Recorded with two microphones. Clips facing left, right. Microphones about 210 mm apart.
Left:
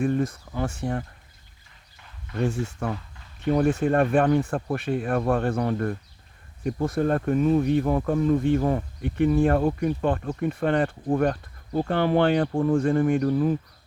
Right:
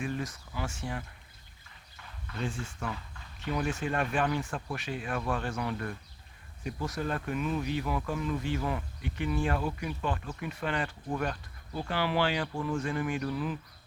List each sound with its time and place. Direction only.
0.0 s speech: 55° left (ahead or behind)
2.4 s speech: 55° left (ahead or behind)
5.5 s speech: 45° left (ahead or behind)
6.7 s speech: 55° left (ahead or behind)
7.3 s speech: 35° left (ahead or behind)
7.6 s speech: 50° left (ahead or behind)
9.0 s speech: 55° left (ahead or behind)